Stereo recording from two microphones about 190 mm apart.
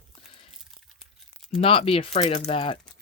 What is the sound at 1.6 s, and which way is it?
Speech, 30° left (ahead or behind).